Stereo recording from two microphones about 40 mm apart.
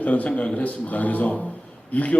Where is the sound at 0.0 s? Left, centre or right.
Left.